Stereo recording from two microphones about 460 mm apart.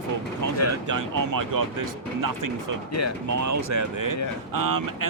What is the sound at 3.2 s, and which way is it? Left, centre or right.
Speech, right.